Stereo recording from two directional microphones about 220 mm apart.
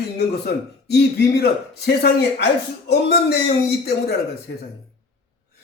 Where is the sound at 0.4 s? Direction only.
45° left (ahead or behind).